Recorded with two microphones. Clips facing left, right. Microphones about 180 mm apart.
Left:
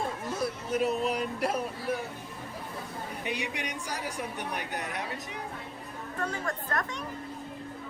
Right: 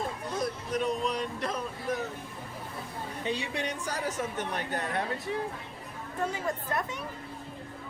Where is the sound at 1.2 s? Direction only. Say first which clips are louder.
Left 3 dB; 10° left (ahead or behind).